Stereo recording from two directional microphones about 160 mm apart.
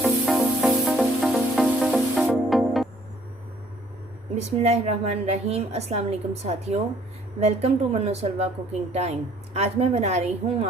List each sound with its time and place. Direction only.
0.0 s music: centre (ahead or behind)
4.4 s a woman's voice: 40° right (ahead or behind)